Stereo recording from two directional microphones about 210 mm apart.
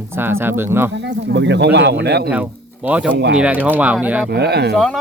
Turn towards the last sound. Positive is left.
turn(degrees=0)  # may be behind; listen again after turning